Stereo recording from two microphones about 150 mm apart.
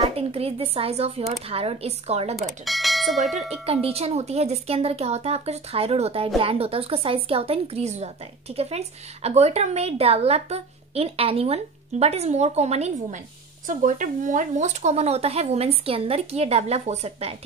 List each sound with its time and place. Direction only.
0.0 s speech: 40° right (ahead or behind)
2.6 s speech: centre (ahead or behind)
3.6 s speech: 40° right (ahead or behind)
13.7 s speech: 60° right (ahead or behind)